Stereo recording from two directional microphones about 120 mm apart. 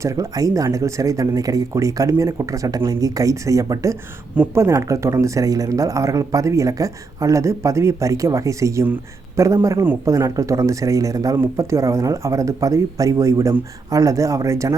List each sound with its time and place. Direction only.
0.0 s speech: 30° right (ahead or behind)